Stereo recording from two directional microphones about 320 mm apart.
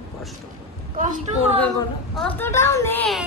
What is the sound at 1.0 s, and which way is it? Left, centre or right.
Speech, right.